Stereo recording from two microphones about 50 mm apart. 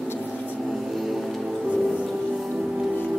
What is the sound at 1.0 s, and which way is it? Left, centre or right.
Music, centre.